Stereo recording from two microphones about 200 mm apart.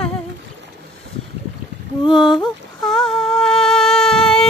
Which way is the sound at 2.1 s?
Centre (ahead or behind).